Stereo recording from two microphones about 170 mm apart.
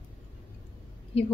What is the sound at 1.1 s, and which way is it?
Speech, 35° left (ahead or behind).